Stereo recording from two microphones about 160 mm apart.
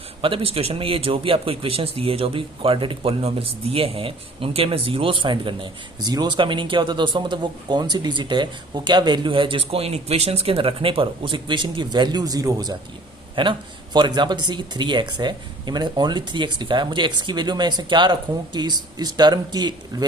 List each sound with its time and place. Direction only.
0.2 s a man's voice: 35° right (ahead or behind)